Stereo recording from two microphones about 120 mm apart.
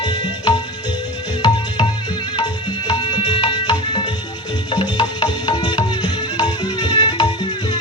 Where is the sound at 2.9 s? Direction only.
40° left (ahead or behind).